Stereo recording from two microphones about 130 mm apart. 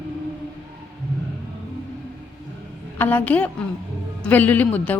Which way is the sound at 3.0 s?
15° left (ahead or behind).